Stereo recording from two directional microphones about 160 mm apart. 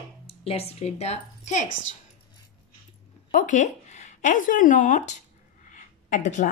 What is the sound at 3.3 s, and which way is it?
A woman's voice, 50° left (ahead or behind).